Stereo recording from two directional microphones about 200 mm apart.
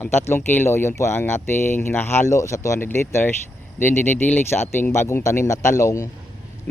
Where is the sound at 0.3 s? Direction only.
10° left (ahead or behind).